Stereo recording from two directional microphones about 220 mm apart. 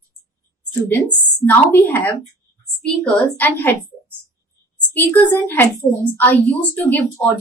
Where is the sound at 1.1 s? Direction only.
10° left (ahead or behind).